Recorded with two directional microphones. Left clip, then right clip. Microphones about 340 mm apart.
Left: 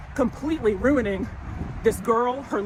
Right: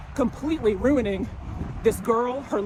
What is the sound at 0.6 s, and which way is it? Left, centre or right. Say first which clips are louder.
Speech: left 1 dB; centre.